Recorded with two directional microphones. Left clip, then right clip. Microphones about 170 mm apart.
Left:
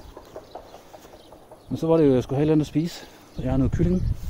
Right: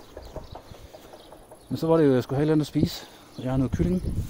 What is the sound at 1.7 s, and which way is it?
Speech, 5° left (ahead or behind).